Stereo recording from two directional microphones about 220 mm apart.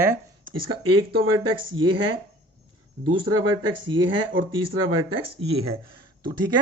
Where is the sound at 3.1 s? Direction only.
20° right (ahead or behind).